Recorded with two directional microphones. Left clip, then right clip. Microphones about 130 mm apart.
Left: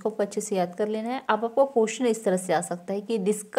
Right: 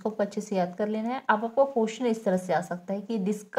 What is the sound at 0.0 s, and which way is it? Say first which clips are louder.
A woman's voice: left 2 dB; 35° left (ahead or behind).